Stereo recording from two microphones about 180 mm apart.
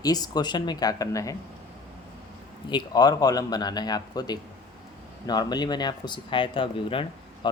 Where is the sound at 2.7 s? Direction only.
25° left (ahead or behind).